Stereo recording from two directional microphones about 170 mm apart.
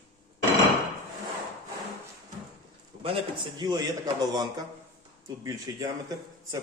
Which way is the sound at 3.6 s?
25° right (ahead or behind).